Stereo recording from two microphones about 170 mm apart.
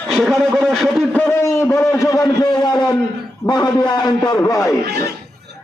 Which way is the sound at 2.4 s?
25° left (ahead or behind).